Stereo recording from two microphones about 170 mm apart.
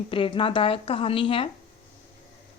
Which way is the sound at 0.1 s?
30° left (ahead or behind).